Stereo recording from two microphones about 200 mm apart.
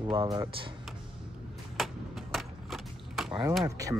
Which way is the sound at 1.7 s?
Centre (ahead or behind).